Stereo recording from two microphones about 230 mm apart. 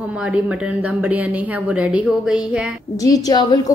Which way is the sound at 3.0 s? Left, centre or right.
Centre.